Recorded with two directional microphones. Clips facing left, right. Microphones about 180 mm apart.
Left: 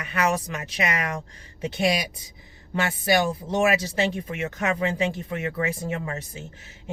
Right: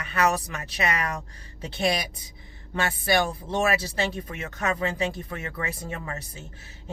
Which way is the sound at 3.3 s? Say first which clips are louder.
Left 3 dB; 20° left (ahead or behind).